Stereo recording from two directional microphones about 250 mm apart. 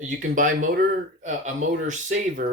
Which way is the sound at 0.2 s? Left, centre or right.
Right.